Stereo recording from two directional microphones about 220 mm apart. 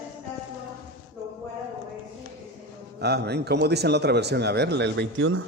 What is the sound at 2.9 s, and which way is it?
Speech, 50° right (ahead or behind).